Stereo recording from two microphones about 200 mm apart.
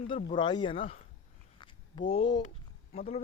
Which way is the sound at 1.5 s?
25° left (ahead or behind).